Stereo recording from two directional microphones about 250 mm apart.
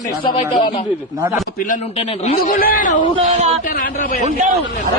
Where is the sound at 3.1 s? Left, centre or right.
Right.